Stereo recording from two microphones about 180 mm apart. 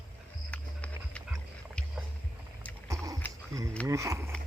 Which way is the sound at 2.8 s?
20° right (ahead or behind).